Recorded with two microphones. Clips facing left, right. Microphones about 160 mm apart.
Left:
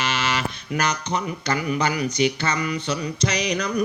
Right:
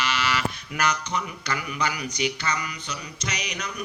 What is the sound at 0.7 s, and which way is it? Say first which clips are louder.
Speech: left 3 dB; 40° left (ahead or behind).